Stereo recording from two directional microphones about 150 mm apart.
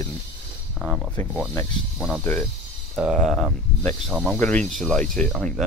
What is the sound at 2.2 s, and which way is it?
Speech, 15° left (ahead or behind).